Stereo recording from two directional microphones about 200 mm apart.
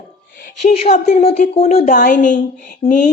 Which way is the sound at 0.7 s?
30° left (ahead or behind).